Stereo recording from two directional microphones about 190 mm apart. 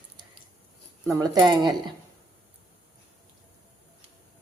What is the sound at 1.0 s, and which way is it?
Speech, 20° right (ahead or behind).